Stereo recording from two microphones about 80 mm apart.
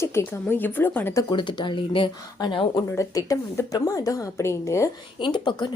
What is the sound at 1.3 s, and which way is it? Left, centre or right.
Speech, left.